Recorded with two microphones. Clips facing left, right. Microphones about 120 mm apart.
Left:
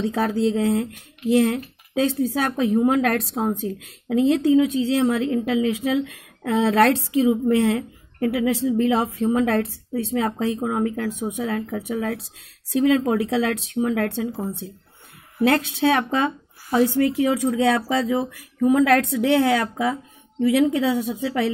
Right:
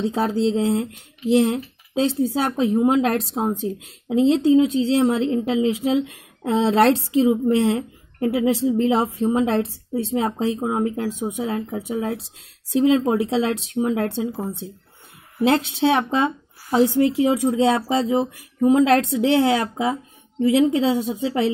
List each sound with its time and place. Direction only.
0.0 s speech: 25° right (ahead or behind)